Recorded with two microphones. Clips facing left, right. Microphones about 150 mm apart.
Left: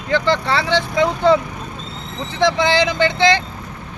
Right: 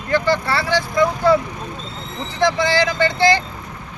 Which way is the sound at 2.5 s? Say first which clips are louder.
Left 2 dB; 20° left (ahead or behind).